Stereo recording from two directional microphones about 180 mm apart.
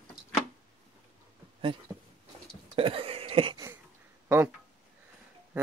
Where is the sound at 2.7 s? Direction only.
30° right (ahead or behind).